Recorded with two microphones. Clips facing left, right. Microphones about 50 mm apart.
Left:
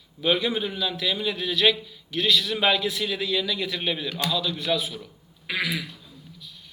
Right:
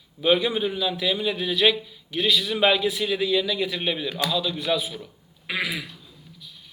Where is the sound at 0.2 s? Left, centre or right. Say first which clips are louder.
Right 3 dB; centre.